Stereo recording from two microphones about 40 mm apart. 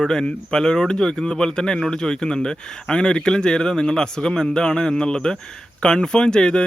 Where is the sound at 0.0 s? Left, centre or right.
Centre.